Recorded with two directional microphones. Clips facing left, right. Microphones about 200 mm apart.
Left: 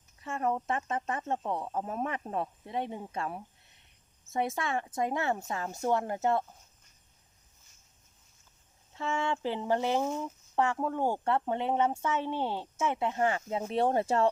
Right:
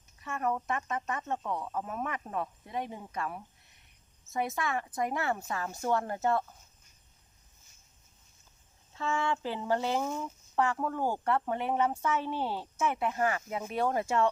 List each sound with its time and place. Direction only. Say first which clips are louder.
0.2 s speech: left 1 dB; 30° left (ahead or behind)
9.0 s speech: even; 20° left (ahead or behind)